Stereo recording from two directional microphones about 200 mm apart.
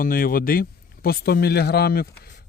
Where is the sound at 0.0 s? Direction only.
45° left (ahead or behind).